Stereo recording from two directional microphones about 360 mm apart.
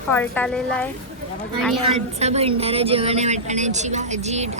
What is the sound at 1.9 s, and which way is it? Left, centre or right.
A woman's voice, centre.